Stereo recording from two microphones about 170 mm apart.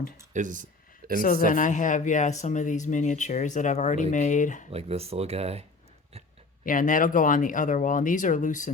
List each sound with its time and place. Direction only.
0.3 s a sound: 50° right (ahead or behind)
1.2 s speech: 55° left (ahead or behind)
4.7 s speech: 35° right (ahead or behind)
6.7 s speech: 50° left (ahead or behind)